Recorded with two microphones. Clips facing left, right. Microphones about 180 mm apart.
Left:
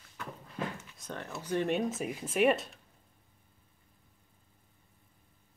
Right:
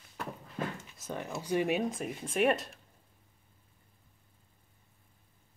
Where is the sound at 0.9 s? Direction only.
10° right (ahead or behind).